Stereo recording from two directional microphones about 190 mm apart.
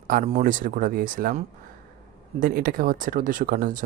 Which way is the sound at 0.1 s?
45° right (ahead or behind).